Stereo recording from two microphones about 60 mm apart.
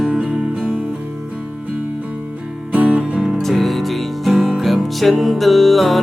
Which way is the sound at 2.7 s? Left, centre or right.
Centre.